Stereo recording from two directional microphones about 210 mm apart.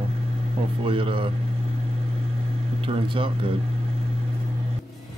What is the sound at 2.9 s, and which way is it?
Speech, 25° right (ahead or behind).